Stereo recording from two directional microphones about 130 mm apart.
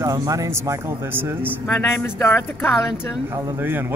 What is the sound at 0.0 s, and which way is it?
Speech, 25° right (ahead or behind).